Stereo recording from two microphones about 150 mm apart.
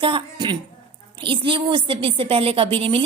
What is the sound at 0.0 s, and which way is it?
A woman's voice, 35° right (ahead or behind).